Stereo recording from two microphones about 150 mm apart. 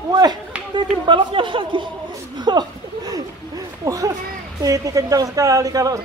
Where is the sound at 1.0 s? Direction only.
35° right (ahead or behind).